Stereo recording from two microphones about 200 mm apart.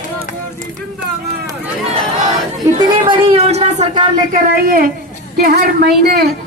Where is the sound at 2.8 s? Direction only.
25° right (ahead or behind).